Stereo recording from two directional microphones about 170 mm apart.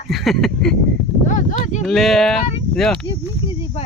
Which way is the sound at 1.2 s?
45° left (ahead or behind).